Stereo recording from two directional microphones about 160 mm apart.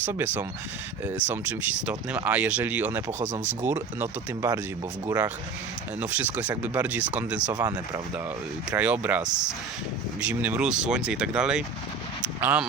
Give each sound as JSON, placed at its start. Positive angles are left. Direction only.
{"t": 0.0, "sound": "speech", "side_deg": -15}
{"t": 6.0, "sound": "speech", "side_deg": -10}
{"t": 7.5, "sound": "speech", "side_deg": -20}
{"t": 8.7, "sound": "speech", "side_deg": -10}